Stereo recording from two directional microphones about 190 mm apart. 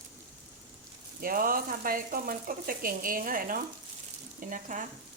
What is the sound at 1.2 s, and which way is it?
Speech, 50° right (ahead or behind).